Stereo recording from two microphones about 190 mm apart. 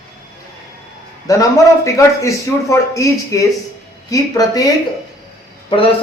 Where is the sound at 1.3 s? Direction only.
15° left (ahead or behind).